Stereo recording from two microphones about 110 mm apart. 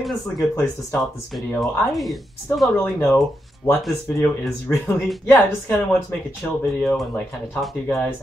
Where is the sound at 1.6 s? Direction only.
Centre (ahead or behind).